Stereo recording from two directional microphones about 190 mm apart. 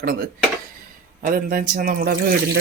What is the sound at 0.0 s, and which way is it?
Speech, 50° right (ahead or behind).